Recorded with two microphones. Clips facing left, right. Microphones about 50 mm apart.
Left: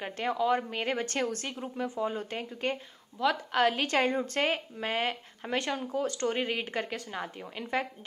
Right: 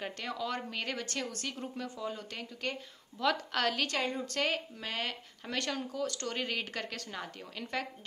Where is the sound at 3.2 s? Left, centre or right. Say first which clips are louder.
Left 4 dB; centre.